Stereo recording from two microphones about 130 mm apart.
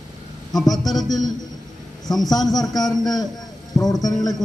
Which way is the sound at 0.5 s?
Centre (ahead or behind).